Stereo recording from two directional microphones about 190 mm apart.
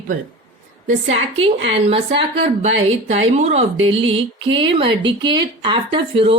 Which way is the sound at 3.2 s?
30° right (ahead or behind).